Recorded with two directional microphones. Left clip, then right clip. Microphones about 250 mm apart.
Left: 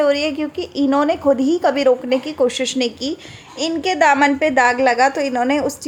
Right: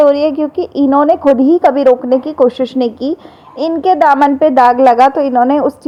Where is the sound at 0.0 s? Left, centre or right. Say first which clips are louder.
Right 8 dB; centre.